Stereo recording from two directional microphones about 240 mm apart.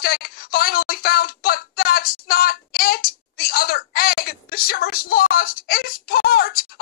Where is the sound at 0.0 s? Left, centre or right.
Left.